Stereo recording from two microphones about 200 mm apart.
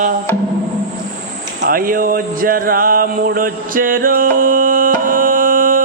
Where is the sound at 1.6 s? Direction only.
45° right (ahead or behind).